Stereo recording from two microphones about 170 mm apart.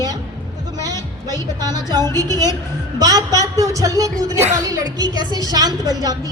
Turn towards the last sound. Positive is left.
turn(degrees=-25)  # may be behind; listen again after turning